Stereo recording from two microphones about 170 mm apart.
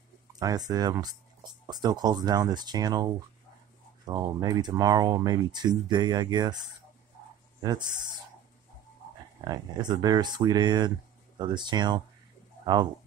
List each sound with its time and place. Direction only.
0.4 s speech: 20° right (ahead or behind)
7.6 s speech: 25° right (ahead or behind)
9.4 s speech: 25° right (ahead or behind)